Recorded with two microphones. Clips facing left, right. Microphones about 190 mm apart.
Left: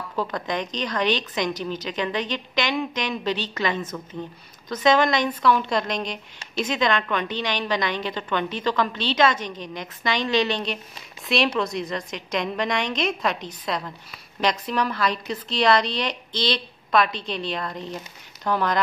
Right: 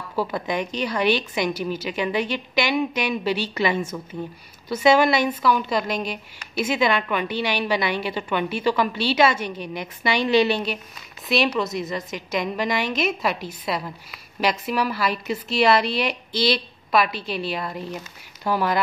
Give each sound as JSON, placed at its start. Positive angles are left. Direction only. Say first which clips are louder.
{"t": 0.1, "sound": "a woman's voice", "louder": "right 3 dB", "side_deg": -10}